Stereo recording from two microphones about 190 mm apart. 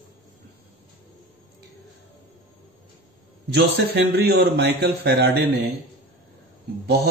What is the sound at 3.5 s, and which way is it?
A man's voice, 60° right (ahead or behind).